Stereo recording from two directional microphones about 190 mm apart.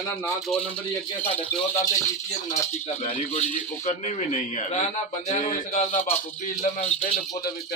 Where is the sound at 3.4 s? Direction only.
35° left (ahead or behind).